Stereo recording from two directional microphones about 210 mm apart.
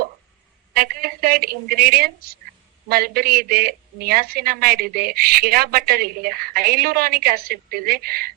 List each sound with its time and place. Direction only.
0.7 s a woman's voice: 45° right (ahead or behind)